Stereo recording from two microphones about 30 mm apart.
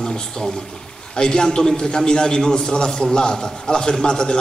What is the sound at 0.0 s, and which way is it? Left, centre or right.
A man's voice, centre.